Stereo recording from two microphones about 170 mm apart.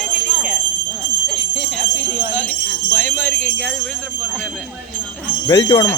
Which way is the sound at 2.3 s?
10° left (ahead or behind).